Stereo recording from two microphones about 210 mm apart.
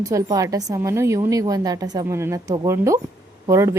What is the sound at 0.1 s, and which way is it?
A woman's voice, 15° right (ahead or behind).